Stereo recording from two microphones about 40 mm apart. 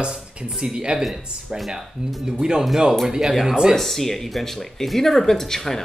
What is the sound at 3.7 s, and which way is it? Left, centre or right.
Speech, centre.